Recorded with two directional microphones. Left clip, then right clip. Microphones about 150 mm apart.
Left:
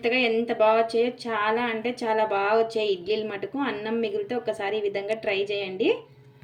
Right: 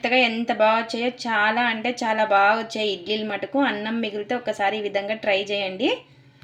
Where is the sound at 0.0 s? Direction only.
30° right (ahead or behind).